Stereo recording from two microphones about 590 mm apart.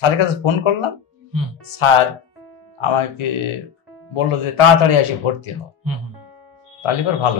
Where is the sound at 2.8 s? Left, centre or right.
Left.